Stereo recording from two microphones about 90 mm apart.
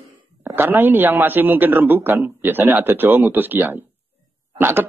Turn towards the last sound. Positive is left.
turn(degrees=-20)  # may be behind; listen again after turning